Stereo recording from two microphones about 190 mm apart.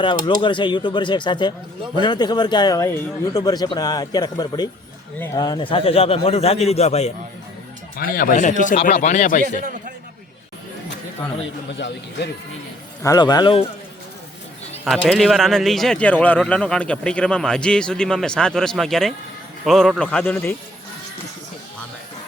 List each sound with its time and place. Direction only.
0.4 s a man's voice: 25° left (ahead or behind)
7.9 s speech: 50° left (ahead or behind)
13.0 s a man's voice: 20° left (ahead or behind)
14.8 s speech: centre (ahead or behind)